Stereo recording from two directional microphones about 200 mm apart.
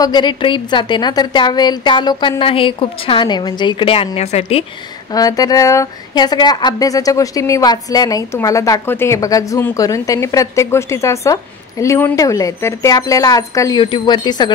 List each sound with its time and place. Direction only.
0.0 s a woman's voice: 20° left (ahead or behind)
5.1 s a woman's voice: 20° left (ahead or behind)